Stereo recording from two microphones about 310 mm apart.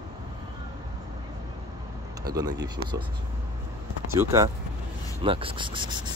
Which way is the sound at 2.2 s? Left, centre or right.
Centre.